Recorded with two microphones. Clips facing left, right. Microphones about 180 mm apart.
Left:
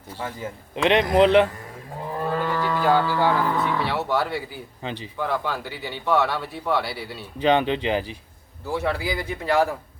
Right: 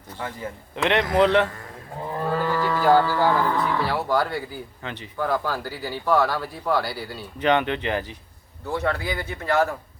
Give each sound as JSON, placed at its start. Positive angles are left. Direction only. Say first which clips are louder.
{"t": 0.8, "sound": "speech", "louder": "left 2 dB", "side_deg": 20}
{"t": 2.3, "sound": "speech", "louder": "right 1 dB", "side_deg": 0}
{"t": 4.8, "sound": "speech", "louder": "left 7 dB", "side_deg": 20}
{"t": 5.1, "sound": "speech", "louder": "right 2 dB", "side_deg": 0}
{"t": 7.5, "sound": "speech", "louder": "left 1 dB", "side_deg": 20}